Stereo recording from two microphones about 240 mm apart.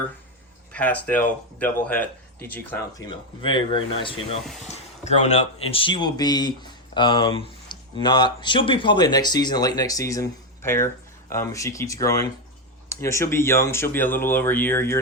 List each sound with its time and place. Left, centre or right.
0.7 s speech: centre